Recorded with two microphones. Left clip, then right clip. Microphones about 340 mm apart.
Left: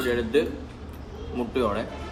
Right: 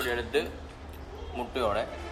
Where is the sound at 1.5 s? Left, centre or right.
Centre.